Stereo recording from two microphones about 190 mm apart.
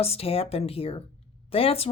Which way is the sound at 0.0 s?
30° left (ahead or behind).